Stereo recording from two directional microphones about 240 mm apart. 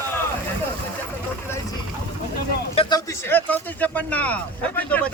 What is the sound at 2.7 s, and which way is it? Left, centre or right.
Speech, centre.